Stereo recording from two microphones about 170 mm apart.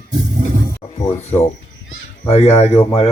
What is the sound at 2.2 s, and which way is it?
Speech, 35° left (ahead or behind).